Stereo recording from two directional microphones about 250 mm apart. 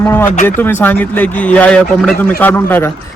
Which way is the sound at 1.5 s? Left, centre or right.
Centre.